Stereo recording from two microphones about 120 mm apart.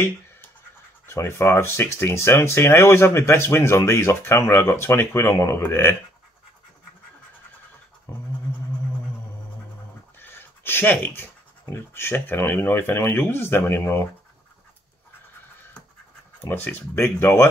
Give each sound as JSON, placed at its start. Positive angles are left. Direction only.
{"t": 1.0, "sound": "speech", "side_deg": 20}
{"t": 8.1, "sound": "scratch", "side_deg": 20}
{"t": 10.1, "sound": "a sound", "side_deg": 20}
{"t": 11.7, "sound": "speech", "side_deg": 20}
{"t": 16.3, "sound": "speech", "side_deg": 15}